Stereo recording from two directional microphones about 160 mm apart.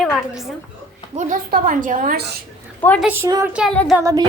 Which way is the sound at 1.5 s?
60° right (ahead or behind).